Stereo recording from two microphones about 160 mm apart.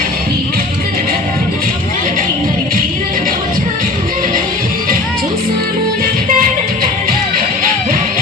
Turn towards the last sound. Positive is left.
turn(degrees=-60)  # may be behind; listen again after turning